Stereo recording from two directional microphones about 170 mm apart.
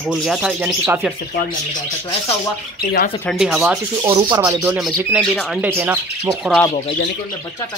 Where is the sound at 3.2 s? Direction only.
Centre (ahead or behind).